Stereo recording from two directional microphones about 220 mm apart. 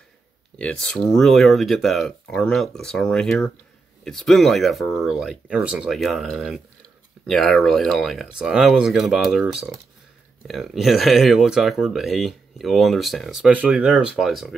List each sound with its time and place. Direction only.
0.6 s speech: 5° left (ahead or behind)